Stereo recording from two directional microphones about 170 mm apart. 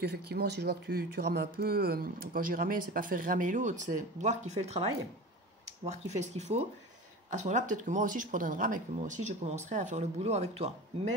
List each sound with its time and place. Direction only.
0.0 s speech: 70° right (ahead or behind); by 4.8 s 40° right (ahead or behind)
5.9 s speech: 40° right (ahead or behind)